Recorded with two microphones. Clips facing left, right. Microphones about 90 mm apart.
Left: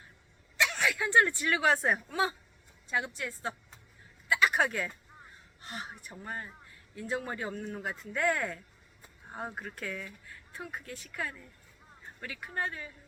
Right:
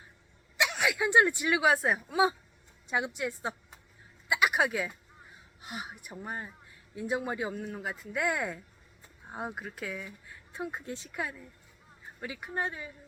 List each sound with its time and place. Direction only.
0.5 s speech: 15° right (ahead or behind)
4.3 s a sound: 15° right (ahead or behind)
5.6 s speech: 10° right (ahead or behind)